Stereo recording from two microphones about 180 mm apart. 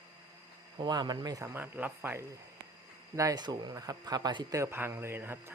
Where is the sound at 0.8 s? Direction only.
25° right (ahead or behind).